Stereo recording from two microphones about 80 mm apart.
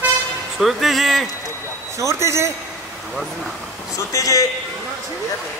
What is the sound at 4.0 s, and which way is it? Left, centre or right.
Speech, left.